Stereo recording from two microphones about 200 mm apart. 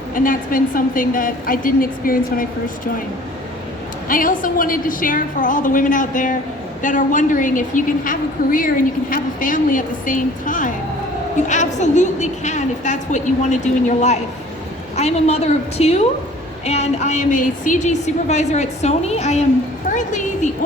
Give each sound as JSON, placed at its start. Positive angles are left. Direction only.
{"t": 0.2, "sound": "a woman's voice", "side_deg": 45}
{"t": 4.1, "sound": "a woman's voice", "side_deg": 45}
{"t": 19.9, "sound": "a sound", "side_deg": 40}